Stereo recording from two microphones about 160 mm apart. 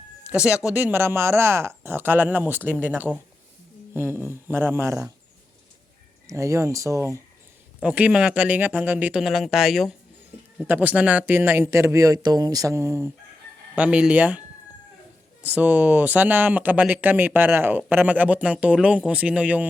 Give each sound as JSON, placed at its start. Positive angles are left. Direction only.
{"t": 0.6, "sound": "speech", "side_deg": -10}
{"t": 6.2, "sound": "speech", "side_deg": -20}
{"t": 7.8, "sound": "speech", "side_deg": -5}
{"t": 15.5, "sound": "speech", "side_deg": -10}